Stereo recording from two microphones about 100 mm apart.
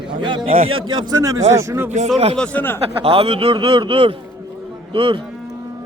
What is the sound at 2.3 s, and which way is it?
Speech, 15° left (ahead or behind).